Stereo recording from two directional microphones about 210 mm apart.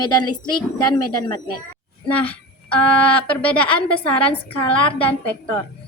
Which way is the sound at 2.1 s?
5° left (ahead or behind).